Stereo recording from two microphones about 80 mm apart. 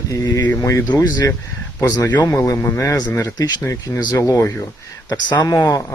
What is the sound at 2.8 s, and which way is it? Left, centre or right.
Speech, left.